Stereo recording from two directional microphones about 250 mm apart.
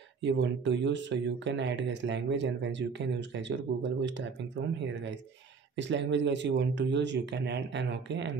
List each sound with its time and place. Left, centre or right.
0.2 s speech: right
5.8 s speech: right